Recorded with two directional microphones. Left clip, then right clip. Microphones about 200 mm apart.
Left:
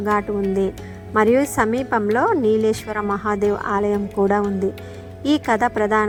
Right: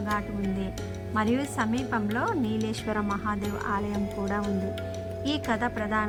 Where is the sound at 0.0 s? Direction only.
30° left (ahead or behind).